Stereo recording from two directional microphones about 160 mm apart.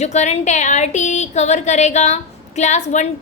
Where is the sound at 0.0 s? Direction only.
45° left (ahead or behind).